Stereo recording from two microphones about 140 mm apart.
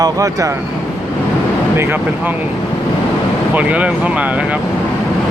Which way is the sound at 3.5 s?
10° right (ahead or behind).